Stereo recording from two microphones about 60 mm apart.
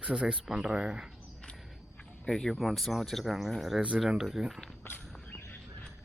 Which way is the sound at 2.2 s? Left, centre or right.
Centre.